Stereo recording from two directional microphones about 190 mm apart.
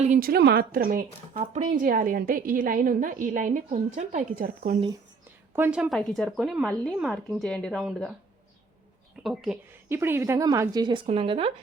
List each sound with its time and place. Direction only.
0.0 s a woman's voice: 45° right (ahead or behind)
5.5 s a woman's voice: 10° right (ahead or behind)
9.2 s speech: centre (ahead or behind)
9.9 s speech: 10° right (ahead or behind); by 11.5 s 30° right (ahead or behind)